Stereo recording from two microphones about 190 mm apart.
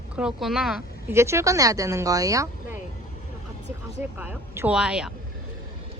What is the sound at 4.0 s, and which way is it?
Speech, 10° right (ahead or behind).